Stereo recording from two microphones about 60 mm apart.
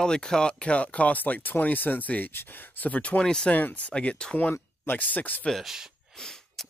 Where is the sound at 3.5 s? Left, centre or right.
Left.